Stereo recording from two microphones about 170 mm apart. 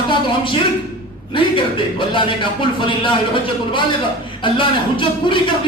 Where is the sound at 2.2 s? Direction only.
30° left (ahead or behind).